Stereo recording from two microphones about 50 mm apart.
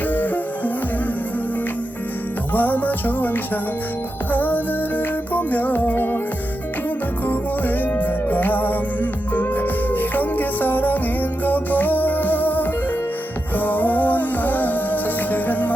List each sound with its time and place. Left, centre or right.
0.1 s music: left
2.5 s music: left
7.3 s music: left